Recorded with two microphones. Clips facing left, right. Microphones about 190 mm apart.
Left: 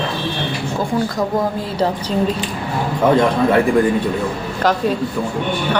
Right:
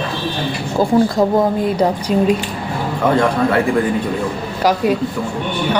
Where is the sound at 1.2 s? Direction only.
15° right (ahead or behind).